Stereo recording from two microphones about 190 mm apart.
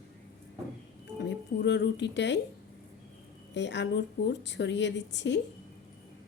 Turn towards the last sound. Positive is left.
turn(degrees=65)  # may be behind; listen again after turning